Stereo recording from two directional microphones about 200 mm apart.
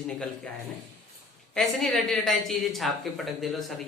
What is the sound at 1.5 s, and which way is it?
A woman's voice, centre (ahead or behind).